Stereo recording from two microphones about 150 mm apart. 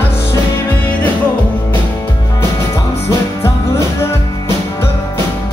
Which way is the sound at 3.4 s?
15° left (ahead or behind).